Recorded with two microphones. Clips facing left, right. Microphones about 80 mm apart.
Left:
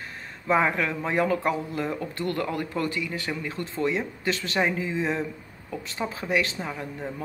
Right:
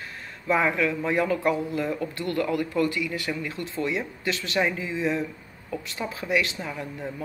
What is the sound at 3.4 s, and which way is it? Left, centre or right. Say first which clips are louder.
Speech: left 1 dB; left.